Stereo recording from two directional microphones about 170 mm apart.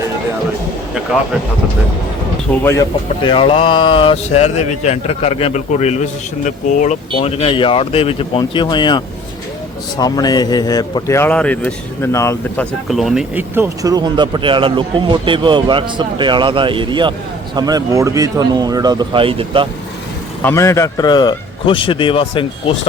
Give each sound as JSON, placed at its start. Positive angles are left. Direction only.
{"t": 2.5, "sound": "speech", "side_deg": 10}
{"t": 3.2, "sound": "speech", "side_deg": 30}
{"t": 7.2, "sound": "a man's voice", "side_deg": 35}
{"t": 12.9, "sound": "speech", "side_deg": 0}
{"t": 13.6, "sound": "a man's voice", "side_deg": -20}
{"t": 20.4, "sound": "a man's voice", "side_deg": 15}